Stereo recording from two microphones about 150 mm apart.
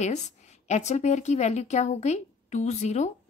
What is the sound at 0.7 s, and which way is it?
Speech, 50° left (ahead or behind).